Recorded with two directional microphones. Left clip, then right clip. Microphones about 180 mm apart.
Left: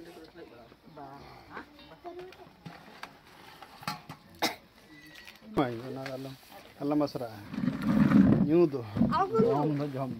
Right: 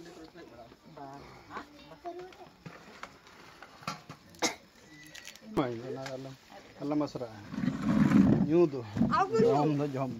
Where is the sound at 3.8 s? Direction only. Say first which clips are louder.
Left 2 dB; 50° left (ahead or behind).